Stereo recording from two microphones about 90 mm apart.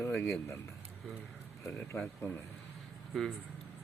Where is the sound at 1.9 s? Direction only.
20° left (ahead or behind).